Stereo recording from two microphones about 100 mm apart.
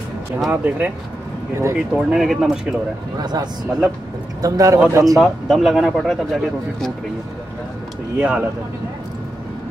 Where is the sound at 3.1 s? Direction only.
40° right (ahead or behind).